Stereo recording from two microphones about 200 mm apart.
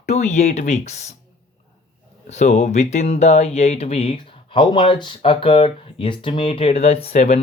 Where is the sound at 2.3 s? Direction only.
35° left (ahead or behind).